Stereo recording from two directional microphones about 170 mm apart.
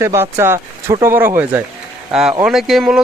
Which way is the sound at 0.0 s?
15° right (ahead or behind).